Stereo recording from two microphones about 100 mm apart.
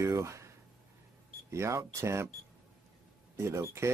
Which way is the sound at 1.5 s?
30° right (ahead or behind).